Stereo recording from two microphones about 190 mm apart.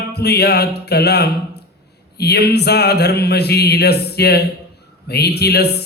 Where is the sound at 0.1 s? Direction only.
60° left (ahead or behind).